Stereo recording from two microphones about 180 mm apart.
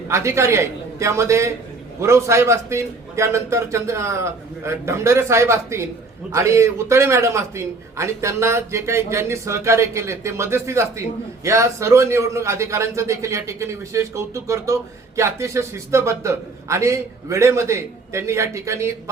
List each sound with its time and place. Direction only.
0.1 s a man's voice: 15° right (ahead or behind)